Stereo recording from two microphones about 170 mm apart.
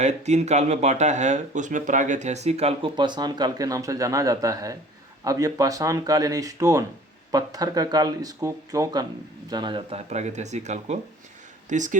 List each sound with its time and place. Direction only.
0.0 s speech: 40° right (ahead or behind)